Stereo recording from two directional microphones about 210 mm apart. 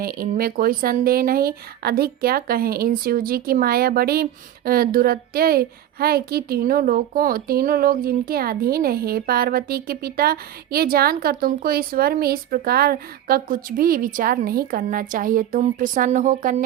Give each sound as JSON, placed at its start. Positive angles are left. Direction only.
{"t": 0.0, "sound": "speech", "side_deg": -45}